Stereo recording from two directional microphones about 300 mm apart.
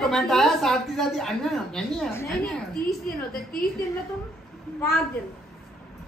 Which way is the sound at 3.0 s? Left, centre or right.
Left.